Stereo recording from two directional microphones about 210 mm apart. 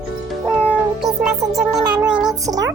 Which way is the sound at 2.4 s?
15° right (ahead or behind).